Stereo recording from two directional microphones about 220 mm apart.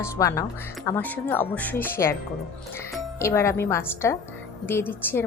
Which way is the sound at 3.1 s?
10° left (ahead or behind).